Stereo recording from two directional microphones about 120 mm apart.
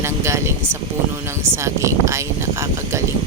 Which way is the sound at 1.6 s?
25° right (ahead or behind).